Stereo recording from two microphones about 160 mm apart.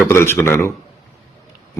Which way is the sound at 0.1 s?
15° left (ahead or behind).